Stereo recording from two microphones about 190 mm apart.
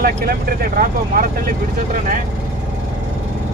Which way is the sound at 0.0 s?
50° right (ahead or behind).